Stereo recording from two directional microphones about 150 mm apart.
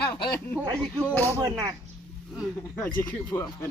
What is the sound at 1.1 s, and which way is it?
Speech, 15° left (ahead or behind).